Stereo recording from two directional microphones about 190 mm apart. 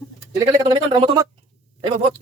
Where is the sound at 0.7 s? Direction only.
25° right (ahead or behind).